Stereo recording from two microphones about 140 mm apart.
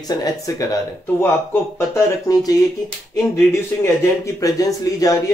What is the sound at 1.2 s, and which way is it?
Speech, 15° left (ahead or behind).